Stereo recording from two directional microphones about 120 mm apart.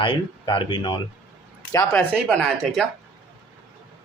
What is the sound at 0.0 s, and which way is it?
Speech, 45° left (ahead or behind).